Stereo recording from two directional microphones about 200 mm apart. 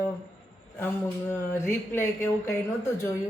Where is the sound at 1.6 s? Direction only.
10° left (ahead or behind).